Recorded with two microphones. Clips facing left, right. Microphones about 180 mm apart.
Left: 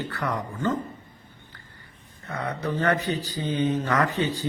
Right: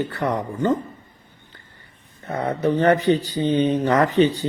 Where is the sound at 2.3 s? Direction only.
25° right (ahead or behind).